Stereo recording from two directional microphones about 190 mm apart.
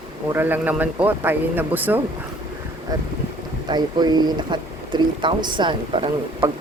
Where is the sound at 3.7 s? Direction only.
20° right (ahead or behind).